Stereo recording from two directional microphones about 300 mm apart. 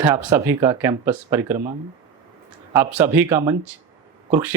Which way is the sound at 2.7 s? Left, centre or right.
Centre.